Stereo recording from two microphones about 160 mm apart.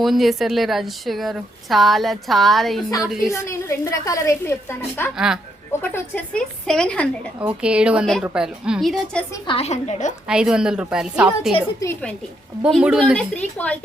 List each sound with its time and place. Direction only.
0.0 s a woman's voice: centre (ahead or behind)
3.3 s a woman's voice: 15° left (ahead or behind)
5.1 s a woman's voice: 5° right (ahead or behind)
5.8 s a woman's voice: 10° left (ahead or behind)
7.3 s a woman's voice: 10° right (ahead or behind)
9.5 s a woman's voice: 40° left (ahead or behind)
10.2 s a woman's voice: 5° right (ahead or behind)
12.6 s a woman's voice: 5° right (ahead or behind)